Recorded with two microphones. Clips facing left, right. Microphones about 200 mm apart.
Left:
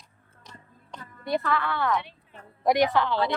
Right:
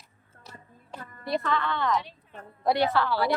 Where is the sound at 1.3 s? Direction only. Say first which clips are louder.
Left 1 dB; 5° left (ahead or behind).